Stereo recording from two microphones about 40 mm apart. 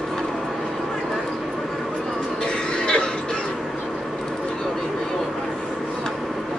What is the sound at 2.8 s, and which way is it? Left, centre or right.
Music, centre.